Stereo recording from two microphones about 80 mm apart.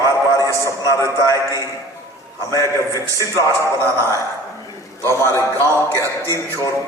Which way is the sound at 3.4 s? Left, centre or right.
Right.